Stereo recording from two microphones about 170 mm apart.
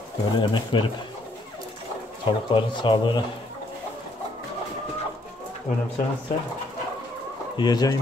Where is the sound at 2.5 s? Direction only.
30° left (ahead or behind).